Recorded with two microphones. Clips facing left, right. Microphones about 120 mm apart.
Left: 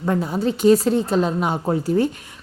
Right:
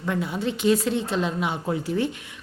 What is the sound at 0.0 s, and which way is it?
A woman's voice, 40° left (ahead or behind).